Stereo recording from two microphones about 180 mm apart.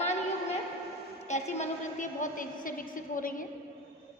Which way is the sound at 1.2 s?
40° left (ahead or behind).